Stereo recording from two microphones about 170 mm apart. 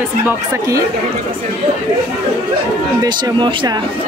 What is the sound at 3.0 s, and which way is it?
Speech, 25° right (ahead or behind).